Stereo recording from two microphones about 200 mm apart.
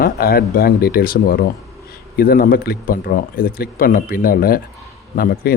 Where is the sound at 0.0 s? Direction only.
50° left (ahead or behind).